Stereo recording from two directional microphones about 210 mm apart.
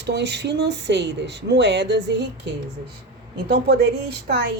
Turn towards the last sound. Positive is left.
turn(degrees=-50)  # may be behind; listen again after turning